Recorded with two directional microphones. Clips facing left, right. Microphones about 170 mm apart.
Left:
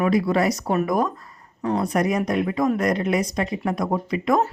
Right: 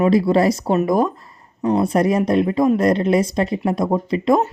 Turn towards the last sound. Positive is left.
turn(degrees=-25)  # may be behind; listen again after turning